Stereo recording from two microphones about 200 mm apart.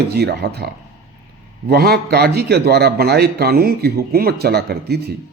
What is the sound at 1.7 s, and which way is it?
A man's voice, 50° right (ahead or behind).